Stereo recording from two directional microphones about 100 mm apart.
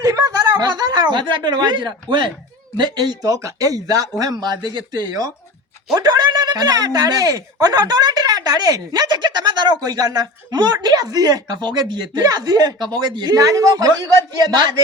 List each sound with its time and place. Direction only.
0.0 s speech: 35° right (ahead or behind)